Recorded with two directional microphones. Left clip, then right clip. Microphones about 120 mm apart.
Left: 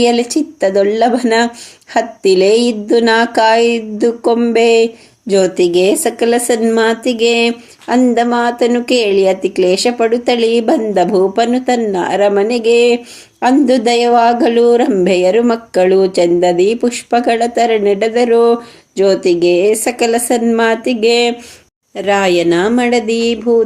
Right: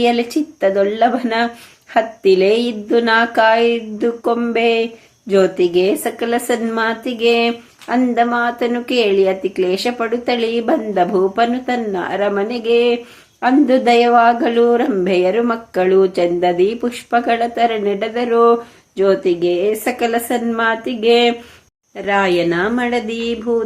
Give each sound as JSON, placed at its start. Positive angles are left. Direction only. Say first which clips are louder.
{"t": 0.0, "sound": "speech", "louder": "left 4 dB", "side_deg": 40}